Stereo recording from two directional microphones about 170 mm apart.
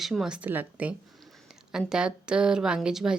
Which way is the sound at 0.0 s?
Centre (ahead or behind).